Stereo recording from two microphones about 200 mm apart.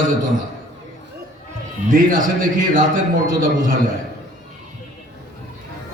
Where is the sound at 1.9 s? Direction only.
45° right (ahead or behind).